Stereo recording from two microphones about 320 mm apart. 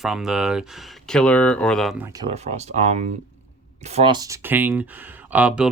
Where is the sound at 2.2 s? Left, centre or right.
Centre.